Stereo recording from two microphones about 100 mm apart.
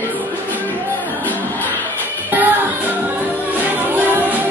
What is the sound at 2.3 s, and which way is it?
Music, 20° right (ahead or behind).